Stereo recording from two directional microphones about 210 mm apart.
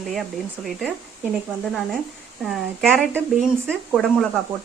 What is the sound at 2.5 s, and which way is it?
Speech, centre (ahead or behind).